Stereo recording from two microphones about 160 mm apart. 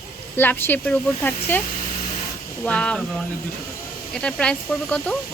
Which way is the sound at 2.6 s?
5° left (ahead or behind).